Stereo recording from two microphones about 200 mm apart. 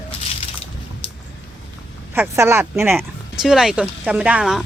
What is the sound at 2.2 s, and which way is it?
Speech, 15° right (ahead or behind).